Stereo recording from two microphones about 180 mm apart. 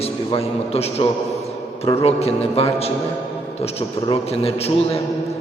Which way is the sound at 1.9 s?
35° left (ahead or behind).